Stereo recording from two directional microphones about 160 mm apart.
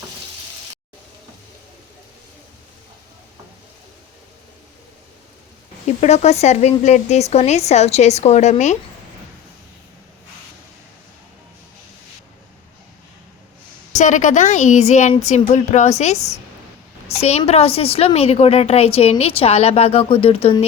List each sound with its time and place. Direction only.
6.0 s speech: 45° left (ahead or behind)
13.9 s a woman's voice: 50° left (ahead or behind)